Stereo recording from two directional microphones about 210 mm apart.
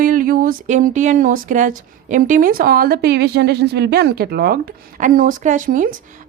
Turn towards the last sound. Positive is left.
turn(degrees=-40)  # may be behind; listen again after turning